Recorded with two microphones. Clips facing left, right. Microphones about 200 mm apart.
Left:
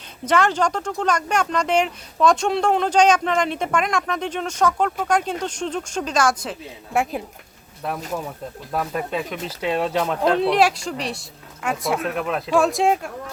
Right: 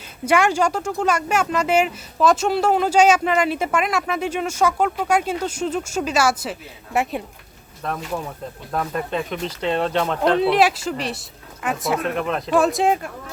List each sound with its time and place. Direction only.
0.3 s speech: 10° right (ahead or behind)